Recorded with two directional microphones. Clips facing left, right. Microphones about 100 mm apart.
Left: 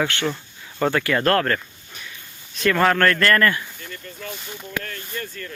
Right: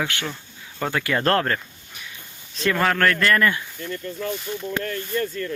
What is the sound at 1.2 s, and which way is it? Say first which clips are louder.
Speech: even; 25° right (ahead or behind).